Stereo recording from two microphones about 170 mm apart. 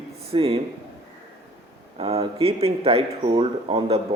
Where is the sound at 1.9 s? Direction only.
35° right (ahead or behind).